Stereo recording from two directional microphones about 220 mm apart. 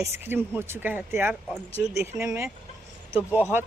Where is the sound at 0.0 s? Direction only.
10° right (ahead or behind).